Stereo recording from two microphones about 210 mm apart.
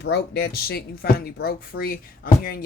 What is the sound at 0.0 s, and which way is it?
Speech, 50° left (ahead or behind).